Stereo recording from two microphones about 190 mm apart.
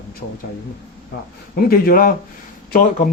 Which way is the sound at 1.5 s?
50° left (ahead or behind).